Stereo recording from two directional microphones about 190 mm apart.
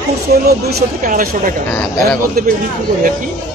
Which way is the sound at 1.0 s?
45° right (ahead or behind).